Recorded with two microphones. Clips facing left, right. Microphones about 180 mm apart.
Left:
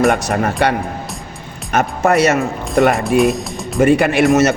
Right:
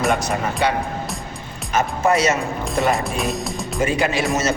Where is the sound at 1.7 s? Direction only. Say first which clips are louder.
Left 4 dB; 60° left (ahead or behind).